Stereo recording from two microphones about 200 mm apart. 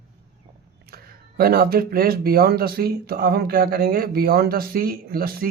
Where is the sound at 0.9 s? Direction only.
50° right (ahead or behind).